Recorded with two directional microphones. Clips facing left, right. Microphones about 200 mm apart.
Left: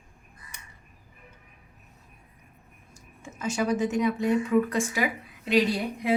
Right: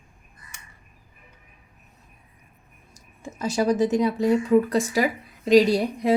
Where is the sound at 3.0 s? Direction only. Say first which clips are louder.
Right 6 dB; 35° right (ahead or behind).